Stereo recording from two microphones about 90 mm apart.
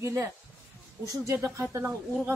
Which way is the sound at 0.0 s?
30° right (ahead or behind).